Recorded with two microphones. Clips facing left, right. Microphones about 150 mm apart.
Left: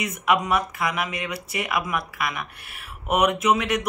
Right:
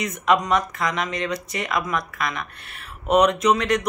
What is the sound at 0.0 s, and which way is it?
Speech, 5° left (ahead or behind).